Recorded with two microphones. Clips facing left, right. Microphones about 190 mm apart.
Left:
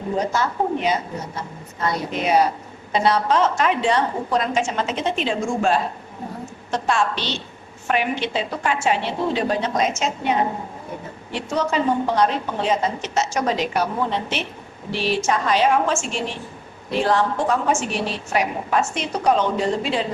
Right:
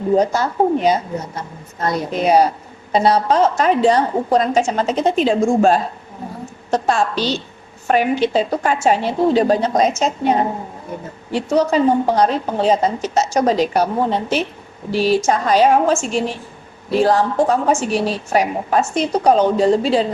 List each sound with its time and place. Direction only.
0.3 s a woman's voice: 40° right (ahead or behind)